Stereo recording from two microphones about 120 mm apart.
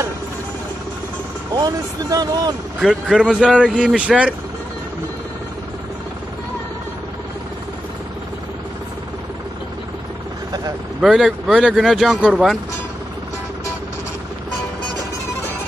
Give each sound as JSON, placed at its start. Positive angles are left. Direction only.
{"t": 1.5, "sound": "speech", "side_deg": -35}
{"t": 2.8, "sound": "speech", "side_deg": -5}
{"t": 11.0, "sound": "speech", "side_deg": -5}